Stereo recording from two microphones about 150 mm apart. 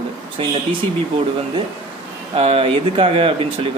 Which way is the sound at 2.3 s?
40° right (ahead or behind).